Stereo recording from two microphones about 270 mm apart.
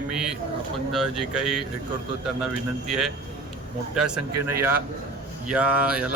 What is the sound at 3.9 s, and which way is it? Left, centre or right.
A man's voice, centre.